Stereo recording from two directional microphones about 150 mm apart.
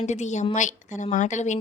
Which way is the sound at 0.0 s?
50° left (ahead or behind).